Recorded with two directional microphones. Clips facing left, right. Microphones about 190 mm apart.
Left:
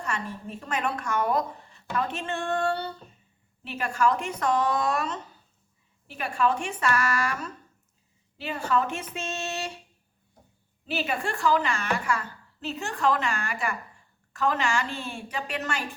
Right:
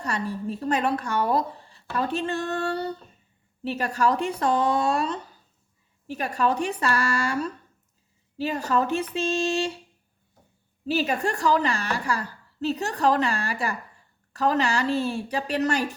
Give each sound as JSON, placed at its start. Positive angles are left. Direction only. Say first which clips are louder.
{"t": 0.0, "sound": "a woman's voice", "louder": "right 5 dB", "side_deg": -35}
{"t": 10.8, "sound": "a woman's voice", "louder": "right 5 dB", "side_deg": -40}